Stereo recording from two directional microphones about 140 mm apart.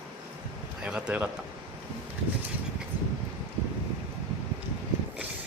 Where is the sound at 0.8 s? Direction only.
5° right (ahead or behind).